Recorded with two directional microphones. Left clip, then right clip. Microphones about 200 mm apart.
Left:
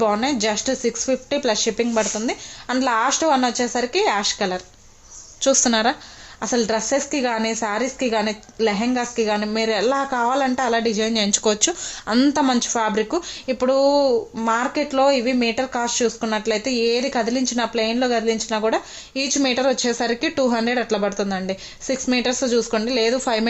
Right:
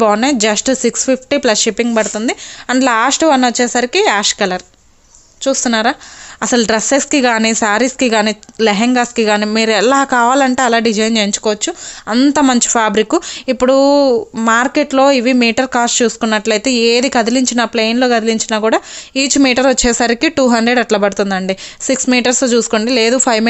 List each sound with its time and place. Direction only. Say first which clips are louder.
0.0 s speech: right 8 dB; 50° right (ahead or behind)
5.4 s speech: right 4 dB; 25° right (ahead or behind)
6.4 s speech: right 8 dB; 50° right (ahead or behind)
11.3 s speech: right 3 dB; 25° right (ahead or behind)
12.3 s speech: right 8 dB; 40° right (ahead or behind)